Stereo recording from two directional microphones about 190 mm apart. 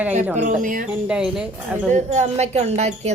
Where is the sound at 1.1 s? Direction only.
5° right (ahead or behind).